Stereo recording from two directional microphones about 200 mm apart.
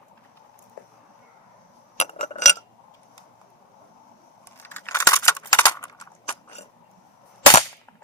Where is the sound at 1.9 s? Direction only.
35° left (ahead or behind).